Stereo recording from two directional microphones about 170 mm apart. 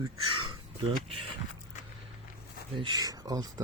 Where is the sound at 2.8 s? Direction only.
25° right (ahead or behind).